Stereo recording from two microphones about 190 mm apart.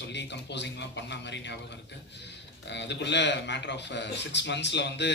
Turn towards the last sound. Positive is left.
turn(degrees=65)  # may be behind; listen again after turning